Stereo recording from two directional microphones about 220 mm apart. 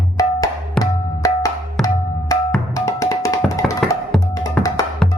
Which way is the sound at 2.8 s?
15° left (ahead or behind).